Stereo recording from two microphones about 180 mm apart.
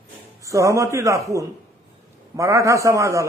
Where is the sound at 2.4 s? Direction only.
15° right (ahead or behind).